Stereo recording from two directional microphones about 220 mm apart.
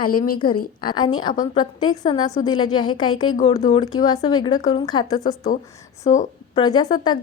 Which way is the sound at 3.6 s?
20° left (ahead or behind).